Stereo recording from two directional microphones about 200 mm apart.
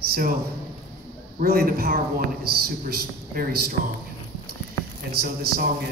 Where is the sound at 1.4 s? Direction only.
50° right (ahead or behind).